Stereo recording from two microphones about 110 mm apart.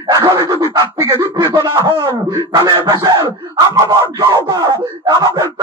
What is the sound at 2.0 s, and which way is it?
Speech, 40° right (ahead or behind).